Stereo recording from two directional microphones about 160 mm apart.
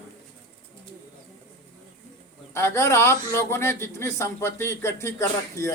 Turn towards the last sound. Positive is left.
turn(degrees=15)  # may be behind; listen again after turning